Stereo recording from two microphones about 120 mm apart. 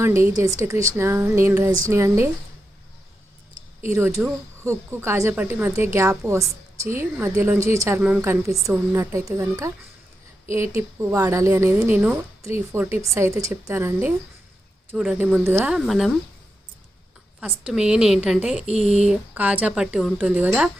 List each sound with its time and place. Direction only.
0.0 s a woman's voice: 25° right (ahead or behind)
3.8 s a woman's voice: 20° right (ahead or behind)
14.9 s speech: 10° right (ahead or behind)
17.7 s speech: 5° right (ahead or behind)